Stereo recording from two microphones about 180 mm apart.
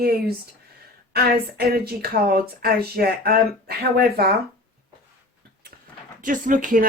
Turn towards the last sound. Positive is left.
turn(degrees=-45)  # may be behind; listen again after turning